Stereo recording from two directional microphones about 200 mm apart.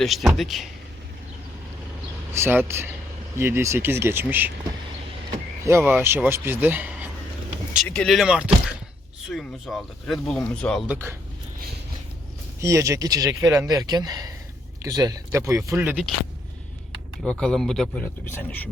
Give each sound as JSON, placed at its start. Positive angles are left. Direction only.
{"t": 0.0, "sound": "speech", "side_deg": 0}
{"t": 2.3, "sound": "speech", "side_deg": -10}
{"t": 5.6, "sound": "speech", "side_deg": -10}
{"t": 7.9, "sound": "speech", "side_deg": 5}
{"t": 10.9, "sound": "speech", "side_deg": -10}
{"t": 12.5, "sound": "speech", "side_deg": -15}
{"t": 17.2, "sound": "speech", "side_deg": 5}